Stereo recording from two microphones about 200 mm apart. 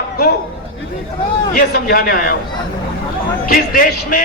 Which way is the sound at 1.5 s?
45° left (ahead or behind).